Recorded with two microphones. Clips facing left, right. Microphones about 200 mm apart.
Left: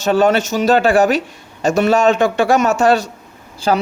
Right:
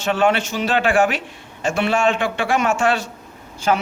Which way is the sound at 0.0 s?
40° left (ahead or behind).